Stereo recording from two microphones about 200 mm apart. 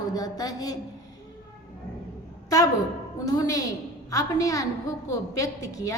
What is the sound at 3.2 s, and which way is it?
A woman's voice, 20° left (ahead or behind).